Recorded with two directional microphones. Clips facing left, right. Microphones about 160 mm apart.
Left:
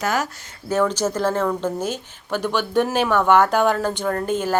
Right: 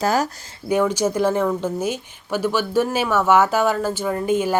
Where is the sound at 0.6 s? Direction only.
10° right (ahead or behind).